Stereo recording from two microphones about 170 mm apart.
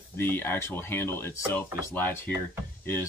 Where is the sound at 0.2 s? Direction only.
15° left (ahead or behind).